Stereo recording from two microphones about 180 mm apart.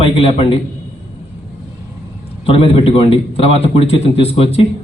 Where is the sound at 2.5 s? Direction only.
30° left (ahead or behind).